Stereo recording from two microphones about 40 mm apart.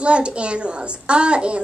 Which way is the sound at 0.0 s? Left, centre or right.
Right.